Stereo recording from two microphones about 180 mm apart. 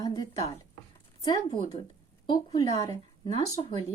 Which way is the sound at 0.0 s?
20° left (ahead or behind).